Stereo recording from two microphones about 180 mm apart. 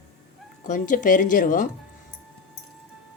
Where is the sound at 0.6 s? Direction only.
45° left (ahead or behind).